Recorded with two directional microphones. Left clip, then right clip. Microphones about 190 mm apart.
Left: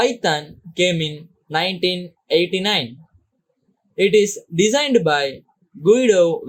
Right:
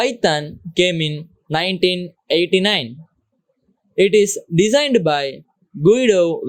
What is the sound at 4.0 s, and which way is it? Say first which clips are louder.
Speech: right 2 dB; 40° right (ahead or behind).